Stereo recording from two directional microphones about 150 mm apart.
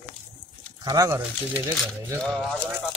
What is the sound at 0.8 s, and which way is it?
Speech, 20° right (ahead or behind).